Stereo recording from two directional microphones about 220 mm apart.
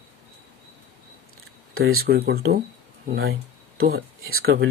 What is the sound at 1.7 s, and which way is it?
Speech, 70° right (ahead or behind).